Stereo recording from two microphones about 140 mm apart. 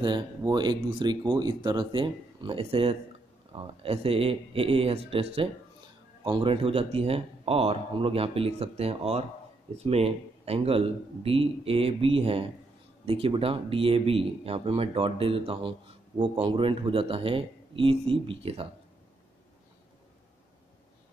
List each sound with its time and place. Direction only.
0.0 s speech: 30° right (ahead or behind)